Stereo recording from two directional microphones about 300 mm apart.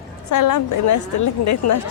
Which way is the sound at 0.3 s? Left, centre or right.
Left.